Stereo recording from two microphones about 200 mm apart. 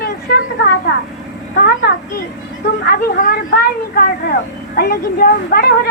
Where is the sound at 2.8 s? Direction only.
45° left (ahead or behind).